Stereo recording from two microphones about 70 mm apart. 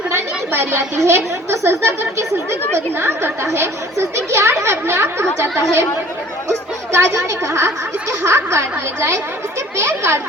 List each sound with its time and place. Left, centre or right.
0.1 s a woman's voice: right
6.9 s a woman's voice: right